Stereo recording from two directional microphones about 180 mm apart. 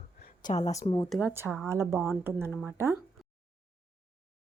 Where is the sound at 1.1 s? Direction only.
5° right (ahead or behind).